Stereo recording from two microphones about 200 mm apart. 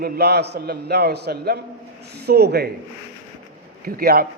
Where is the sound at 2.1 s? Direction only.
55° right (ahead or behind).